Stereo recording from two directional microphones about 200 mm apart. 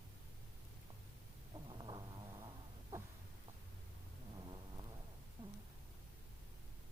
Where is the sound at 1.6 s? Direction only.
25° right (ahead or behind).